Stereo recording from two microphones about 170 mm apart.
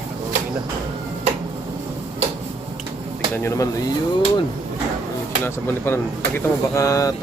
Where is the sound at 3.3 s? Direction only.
15° left (ahead or behind).